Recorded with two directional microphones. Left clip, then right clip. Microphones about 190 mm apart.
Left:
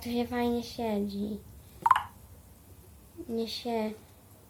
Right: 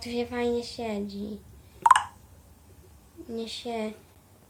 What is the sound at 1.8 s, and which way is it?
Telephone dialing, 50° right (ahead or behind).